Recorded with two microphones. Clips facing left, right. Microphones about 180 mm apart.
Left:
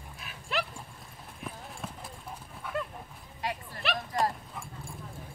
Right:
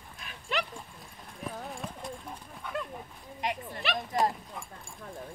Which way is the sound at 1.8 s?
5° left (ahead or behind).